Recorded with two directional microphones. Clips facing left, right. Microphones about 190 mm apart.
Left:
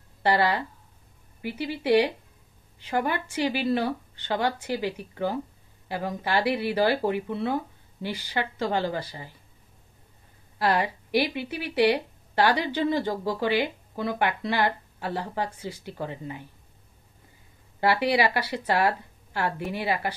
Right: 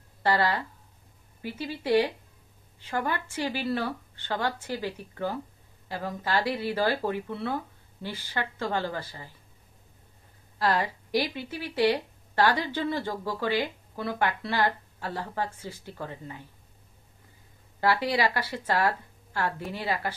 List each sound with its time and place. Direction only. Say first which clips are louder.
0.2 s a woman's voice: left 2 dB; 15° left (ahead or behind)
10.6 s a woman's voice: left 2 dB; 15° left (ahead or behind)
17.7 s a woman's voice: left 3 dB; 15° left (ahead or behind)